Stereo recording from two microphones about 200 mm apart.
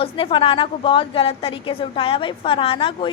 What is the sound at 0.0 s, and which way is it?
A woman's voice, 25° left (ahead or behind).